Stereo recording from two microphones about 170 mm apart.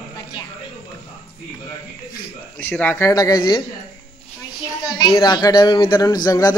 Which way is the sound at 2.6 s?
10° left (ahead or behind).